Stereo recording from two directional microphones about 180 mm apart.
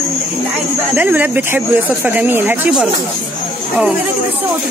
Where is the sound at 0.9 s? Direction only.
10° right (ahead or behind).